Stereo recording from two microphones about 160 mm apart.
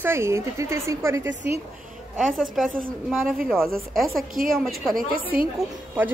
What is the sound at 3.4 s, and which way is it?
Speech, centre (ahead or behind).